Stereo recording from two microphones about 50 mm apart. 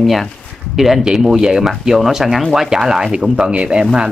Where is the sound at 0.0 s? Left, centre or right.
Centre.